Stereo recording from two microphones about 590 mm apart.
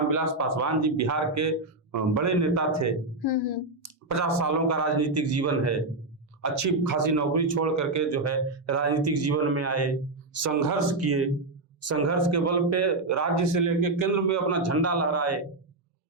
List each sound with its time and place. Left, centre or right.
0.1 s speech: right
3.2 s speech: left
3.8 s speech: right